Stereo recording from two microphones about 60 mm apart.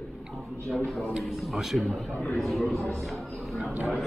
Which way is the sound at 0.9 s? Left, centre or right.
Centre.